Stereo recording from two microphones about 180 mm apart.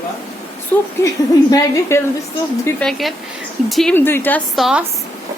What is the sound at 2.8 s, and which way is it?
Speech, centre (ahead or behind).